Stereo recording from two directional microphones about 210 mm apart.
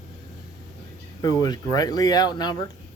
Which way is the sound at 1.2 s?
20° left (ahead or behind).